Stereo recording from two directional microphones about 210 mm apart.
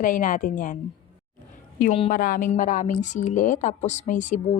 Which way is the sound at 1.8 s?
30° left (ahead or behind).